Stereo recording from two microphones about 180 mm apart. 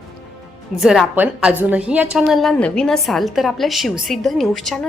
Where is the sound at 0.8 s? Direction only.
5° right (ahead or behind).